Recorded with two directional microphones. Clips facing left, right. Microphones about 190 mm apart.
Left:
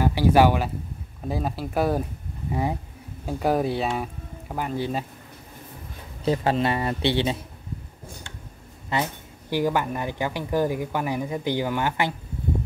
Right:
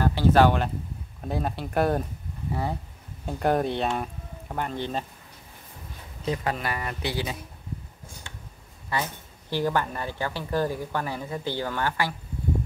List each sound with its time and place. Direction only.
0.0 s speech: 10° left (ahead or behind)
2.5 s speech: 15° left (ahead or behind)
3.3 s speech: 5° left (ahead or behind)
6.2 s speech: 30° left (ahead or behind)
8.9 s speech: 15° left (ahead or behind)